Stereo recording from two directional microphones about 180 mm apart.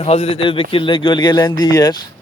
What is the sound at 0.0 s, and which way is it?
A man's voice, 35° left (ahead or behind).